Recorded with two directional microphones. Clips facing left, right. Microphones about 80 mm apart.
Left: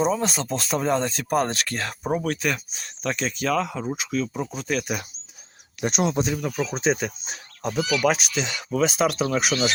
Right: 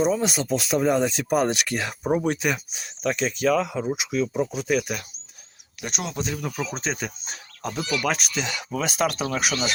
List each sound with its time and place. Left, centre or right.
0.0 s speech: centre
5.8 s speech: left
6.2 s speech: centre